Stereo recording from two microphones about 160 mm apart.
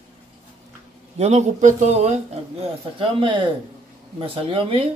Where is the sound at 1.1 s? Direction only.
45° right (ahead or behind).